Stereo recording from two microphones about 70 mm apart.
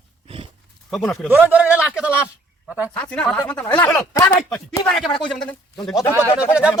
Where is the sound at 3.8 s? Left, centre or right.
Left.